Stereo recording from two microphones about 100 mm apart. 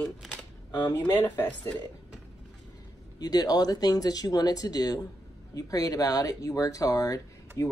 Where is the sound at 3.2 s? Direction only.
40° left (ahead or behind).